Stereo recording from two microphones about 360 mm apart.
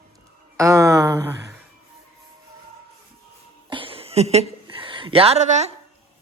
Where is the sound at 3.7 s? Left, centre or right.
Centre.